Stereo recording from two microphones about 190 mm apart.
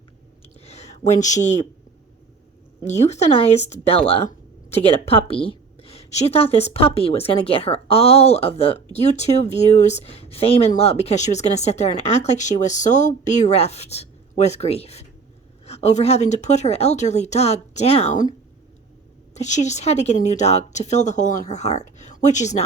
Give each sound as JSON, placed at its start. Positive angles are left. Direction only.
{"t": 0.4, "sound": "a sound", "side_deg": 35}
{"t": 2.8, "sound": "speech", "side_deg": 35}
{"t": 19.3, "sound": "speech", "side_deg": 40}